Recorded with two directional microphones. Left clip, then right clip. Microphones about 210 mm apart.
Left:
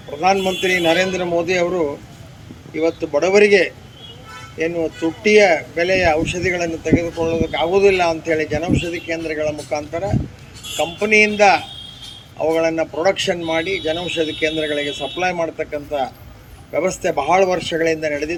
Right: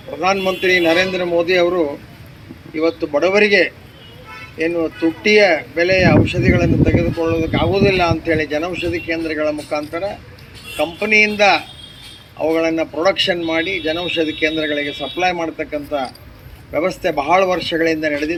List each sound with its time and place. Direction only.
0.2 s speech: 40° left (ahead or behind)
12.4 s speech: 40° left (ahead or behind)